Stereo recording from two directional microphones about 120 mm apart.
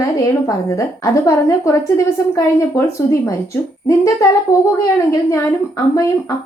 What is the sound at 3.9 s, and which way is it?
A woman's voice, 25° left (ahead or behind).